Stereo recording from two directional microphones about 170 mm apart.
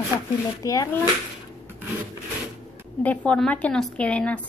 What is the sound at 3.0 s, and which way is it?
Speech, 10° left (ahead or behind).